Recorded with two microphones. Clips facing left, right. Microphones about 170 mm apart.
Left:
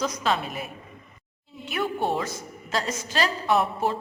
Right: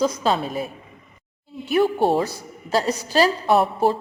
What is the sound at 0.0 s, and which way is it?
Speech, 30° right (ahead or behind).